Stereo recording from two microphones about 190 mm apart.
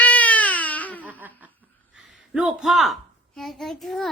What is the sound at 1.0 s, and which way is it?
Laughter, 10° right (ahead or behind).